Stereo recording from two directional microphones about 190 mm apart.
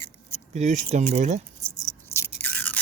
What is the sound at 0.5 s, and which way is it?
Speech, 40° right (ahead or behind).